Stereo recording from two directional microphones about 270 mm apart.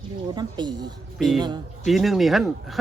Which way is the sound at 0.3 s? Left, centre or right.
Centre.